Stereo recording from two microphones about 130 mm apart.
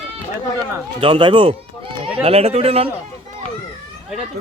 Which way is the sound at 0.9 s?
45° right (ahead or behind).